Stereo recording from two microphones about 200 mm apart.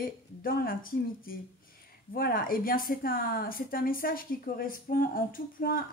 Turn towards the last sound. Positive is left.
turn(degrees=45)  # may be behind; listen again after turning